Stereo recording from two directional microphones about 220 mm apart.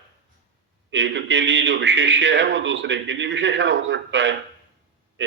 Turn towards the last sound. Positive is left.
turn(degrees=-55)  # may be behind; listen again after turning